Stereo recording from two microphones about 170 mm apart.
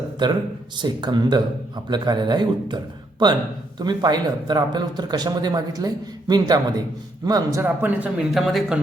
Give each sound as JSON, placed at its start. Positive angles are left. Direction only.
{"t": 0.2, "sound": "speech", "side_deg": -25}
{"t": 7.6, "sound": "speech", "side_deg": -10}